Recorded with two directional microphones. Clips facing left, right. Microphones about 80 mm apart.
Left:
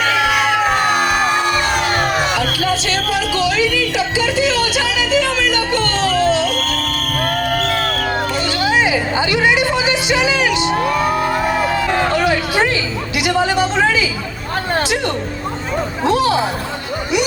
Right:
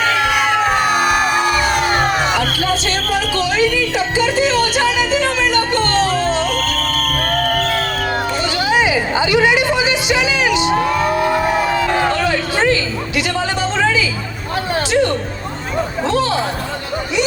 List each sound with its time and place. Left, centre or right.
0.1 s a sound: centre
0.7 s crowd: centre
2.7 s music: right
7.2 s music: centre
8.5 s music: right
12.1 s a sound: centre